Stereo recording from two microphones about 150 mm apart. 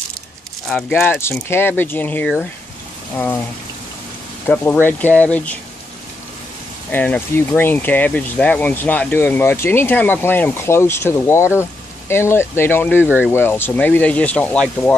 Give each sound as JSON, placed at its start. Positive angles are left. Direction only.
{"t": 0.7, "sound": "speech", "side_deg": 5}
{"t": 1.5, "sound": "speech", "side_deg": 15}
{"t": 4.5, "sound": "speech", "side_deg": 15}
{"t": 6.9, "sound": "speech", "side_deg": 10}